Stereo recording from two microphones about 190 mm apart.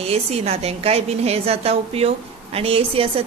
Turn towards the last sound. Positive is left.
turn(degrees=-30)  # may be behind; listen again after turning